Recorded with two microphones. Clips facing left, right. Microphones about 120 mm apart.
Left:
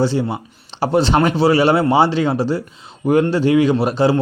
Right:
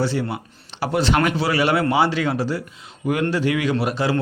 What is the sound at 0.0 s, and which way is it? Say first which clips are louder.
Speech: left 5 dB; 25° left (ahead or behind).